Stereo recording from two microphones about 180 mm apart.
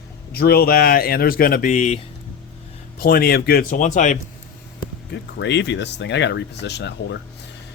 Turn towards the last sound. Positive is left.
turn(degrees=70)  # may be behind; listen again after turning